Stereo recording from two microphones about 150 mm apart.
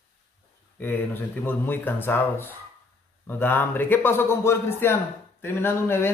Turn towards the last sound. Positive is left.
turn(degrees=15)  # may be behind; listen again after turning